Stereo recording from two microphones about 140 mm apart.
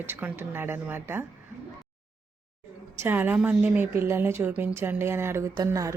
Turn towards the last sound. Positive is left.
turn(degrees=-25)  # may be behind; listen again after turning